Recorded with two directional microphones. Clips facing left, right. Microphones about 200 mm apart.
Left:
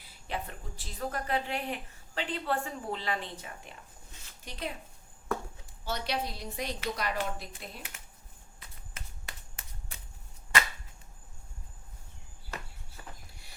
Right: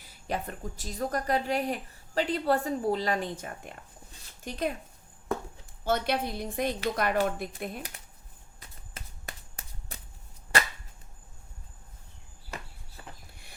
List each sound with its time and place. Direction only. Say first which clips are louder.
0.0 s a woman's voice: right 4 dB; 45° right (ahead or behind)
5.8 s a woman's voice: right 6 dB; 55° right (ahead or behind)
7.8 s speech: right 6 dB; 35° right (ahead or behind)
9.0 s finger snapping: right 4 dB; 40° right (ahead or behind)